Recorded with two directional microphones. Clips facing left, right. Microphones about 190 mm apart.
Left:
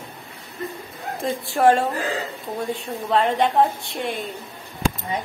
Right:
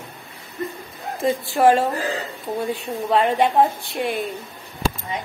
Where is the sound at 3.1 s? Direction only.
5° right (ahead or behind).